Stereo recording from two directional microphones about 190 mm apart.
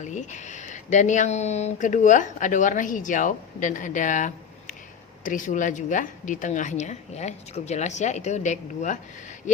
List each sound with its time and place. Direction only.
0.0 s speech: 40° left (ahead or behind)